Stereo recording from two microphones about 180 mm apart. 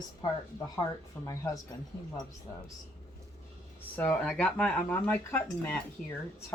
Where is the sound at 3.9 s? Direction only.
10° left (ahead or behind).